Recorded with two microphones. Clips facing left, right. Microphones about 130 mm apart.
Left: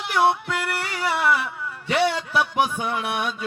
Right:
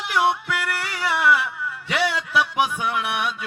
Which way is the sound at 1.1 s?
25° left (ahead or behind).